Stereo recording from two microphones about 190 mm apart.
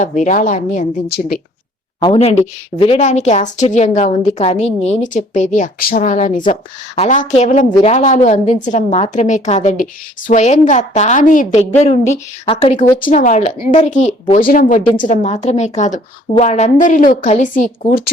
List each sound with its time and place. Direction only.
0.0 s a woman's voice: 40° left (ahead or behind)
2.1 s a woman's voice: 35° left (ahead or behind)